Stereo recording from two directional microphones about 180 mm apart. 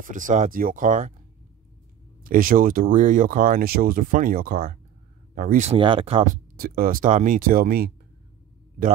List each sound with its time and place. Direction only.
0.1 s speech: 45° right (ahead or behind)
2.2 s speech: 50° right (ahead or behind)
5.7 s speech: 30° right (ahead or behind)
6.2 s speech: 55° right (ahead or behind)